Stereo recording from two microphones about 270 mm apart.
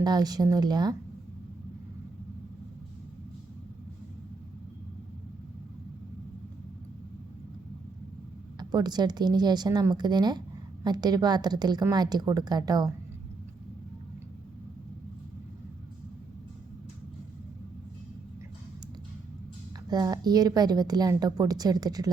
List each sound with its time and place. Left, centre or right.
0.0 s a woman's voice: centre
8.5 s a woman's voice: centre
19.9 s a woman's voice: centre